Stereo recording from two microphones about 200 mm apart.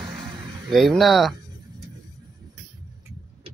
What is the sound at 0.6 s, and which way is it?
Speech, centre (ahead or behind).